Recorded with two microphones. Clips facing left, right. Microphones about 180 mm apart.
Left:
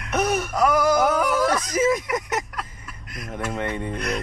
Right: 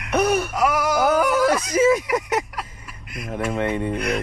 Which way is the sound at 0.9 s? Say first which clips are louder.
Right 2 dB; 10° right (ahead or behind).